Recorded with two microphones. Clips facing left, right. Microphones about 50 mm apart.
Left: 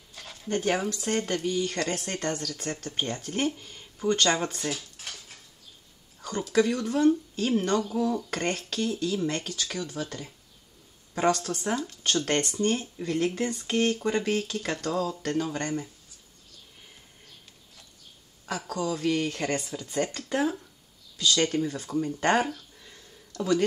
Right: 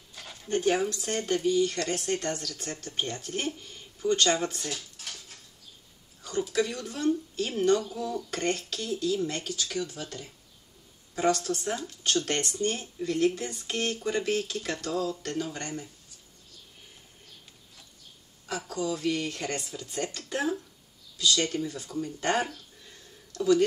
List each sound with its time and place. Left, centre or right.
0.1 s dog: centre
0.5 s speech: left
6.5 s speech: left
11.4 s speech: left
18.7 s speech: left
21.2 s a man's voice: left